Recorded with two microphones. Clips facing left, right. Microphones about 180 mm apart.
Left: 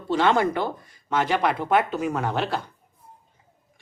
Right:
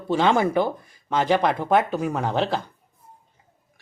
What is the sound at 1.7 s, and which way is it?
Speech, 15° right (ahead or behind).